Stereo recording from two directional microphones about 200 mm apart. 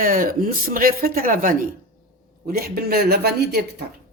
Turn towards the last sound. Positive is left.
turn(degrees=-55)  # may be behind; listen again after turning